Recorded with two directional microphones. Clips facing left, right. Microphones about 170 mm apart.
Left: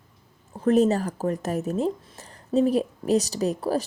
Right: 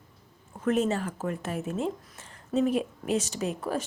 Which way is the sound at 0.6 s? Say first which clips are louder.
Left 6 dB; 35° left (ahead or behind).